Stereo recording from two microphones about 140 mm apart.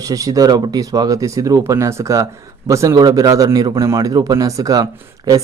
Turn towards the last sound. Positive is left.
turn(degrees=-25)  # may be behind; listen again after turning